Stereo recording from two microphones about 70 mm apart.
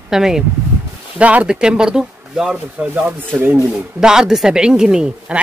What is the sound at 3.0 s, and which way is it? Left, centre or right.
Speech, right.